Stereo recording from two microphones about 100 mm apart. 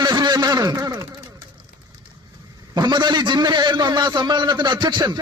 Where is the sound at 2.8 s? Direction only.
45° right (ahead or behind).